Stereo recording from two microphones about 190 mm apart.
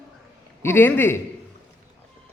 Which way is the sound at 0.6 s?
10° left (ahead or behind).